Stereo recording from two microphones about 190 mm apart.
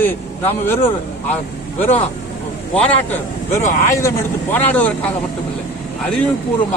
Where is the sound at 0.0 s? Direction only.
10° left (ahead or behind).